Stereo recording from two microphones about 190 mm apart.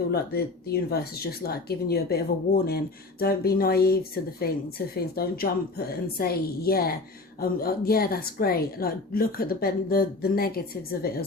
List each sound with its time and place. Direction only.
0.1 s speech: 55° left (ahead or behind)